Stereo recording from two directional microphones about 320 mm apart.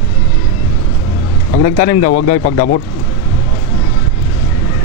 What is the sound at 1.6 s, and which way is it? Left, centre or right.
Speech, left.